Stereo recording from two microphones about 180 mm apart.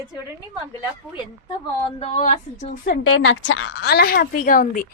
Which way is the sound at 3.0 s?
90° left.